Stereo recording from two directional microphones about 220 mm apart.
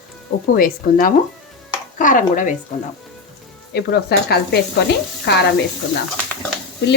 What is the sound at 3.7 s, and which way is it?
Speech, 45° left (ahead or behind).